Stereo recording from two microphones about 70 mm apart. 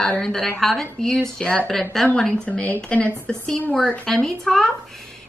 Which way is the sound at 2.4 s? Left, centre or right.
Left.